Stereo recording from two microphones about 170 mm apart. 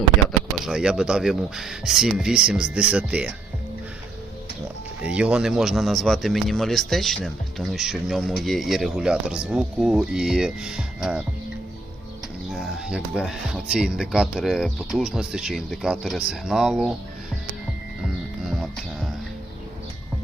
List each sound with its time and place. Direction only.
0.6 s speech: 5° right (ahead or behind)
5.0 s speech: 5° right (ahead or behind)
12.5 s speech: 5° right (ahead or behind)